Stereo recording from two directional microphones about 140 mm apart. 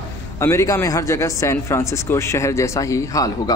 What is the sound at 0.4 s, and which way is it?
A man's voice, 20° left (ahead or behind).